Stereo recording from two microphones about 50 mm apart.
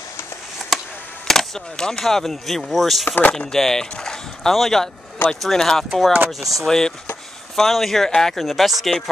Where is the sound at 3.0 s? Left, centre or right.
Left.